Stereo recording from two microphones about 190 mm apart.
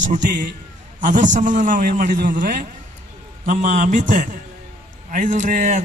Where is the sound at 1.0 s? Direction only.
40° right (ahead or behind).